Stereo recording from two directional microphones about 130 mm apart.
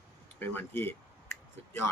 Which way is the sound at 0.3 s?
15° left (ahead or behind).